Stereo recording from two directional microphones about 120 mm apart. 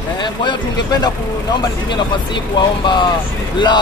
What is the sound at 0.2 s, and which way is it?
Speech, 40° left (ahead or behind).